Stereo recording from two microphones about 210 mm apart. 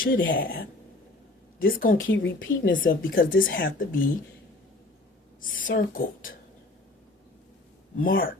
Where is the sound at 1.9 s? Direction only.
65° left (ahead or behind).